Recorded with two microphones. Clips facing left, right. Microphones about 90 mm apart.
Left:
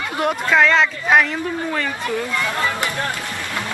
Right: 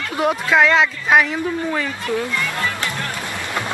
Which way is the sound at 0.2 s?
5° right (ahead or behind).